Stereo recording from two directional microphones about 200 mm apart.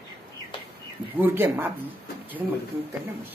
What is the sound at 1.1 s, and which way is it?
Speech, 10° right (ahead or behind).